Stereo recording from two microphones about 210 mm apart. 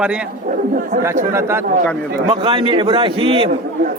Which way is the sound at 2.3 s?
25° right (ahead or behind).